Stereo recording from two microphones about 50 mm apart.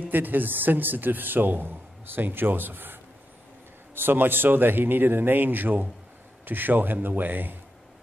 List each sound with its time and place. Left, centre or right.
0.0 s a man's voice: right